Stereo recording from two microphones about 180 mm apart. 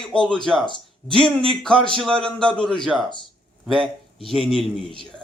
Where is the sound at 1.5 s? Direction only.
5° left (ahead or behind).